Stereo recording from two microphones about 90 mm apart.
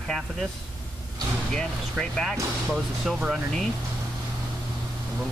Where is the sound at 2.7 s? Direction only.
5° right (ahead or behind).